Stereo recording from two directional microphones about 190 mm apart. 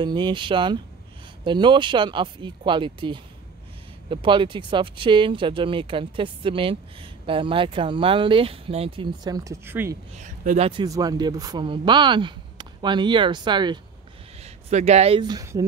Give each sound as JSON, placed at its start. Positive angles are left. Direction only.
{"t": 0.0, "sound": "speech", "side_deg": -25}
{"t": 10.1, "sound": "speech", "side_deg": -40}
{"t": 10.7, "sound": "speech", "side_deg": -20}
{"t": 14.4, "sound": "speech", "side_deg": -35}